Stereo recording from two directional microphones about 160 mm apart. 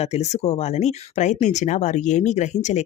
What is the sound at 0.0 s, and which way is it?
Speech, 45° left (ahead or behind).